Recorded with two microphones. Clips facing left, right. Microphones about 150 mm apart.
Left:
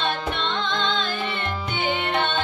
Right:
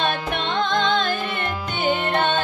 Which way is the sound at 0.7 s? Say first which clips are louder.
Right 5 dB; 50° right (ahead or behind).